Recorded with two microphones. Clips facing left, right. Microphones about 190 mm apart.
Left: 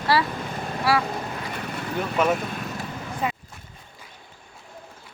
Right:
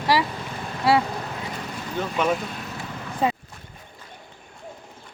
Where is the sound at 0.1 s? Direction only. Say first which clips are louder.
Even; 15° right (ahead or behind).